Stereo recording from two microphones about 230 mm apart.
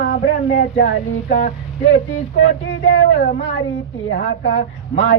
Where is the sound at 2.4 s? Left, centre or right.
Left.